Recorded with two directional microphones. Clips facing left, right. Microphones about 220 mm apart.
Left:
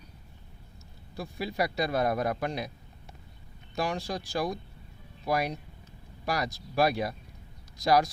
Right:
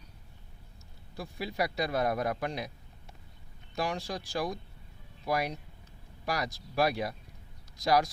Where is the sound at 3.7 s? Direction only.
40° left (ahead or behind).